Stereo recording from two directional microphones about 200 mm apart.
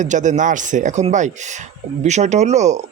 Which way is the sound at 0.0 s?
40° right (ahead or behind).